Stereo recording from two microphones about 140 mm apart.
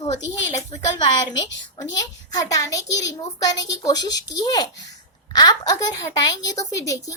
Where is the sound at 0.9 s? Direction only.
30° left (ahead or behind).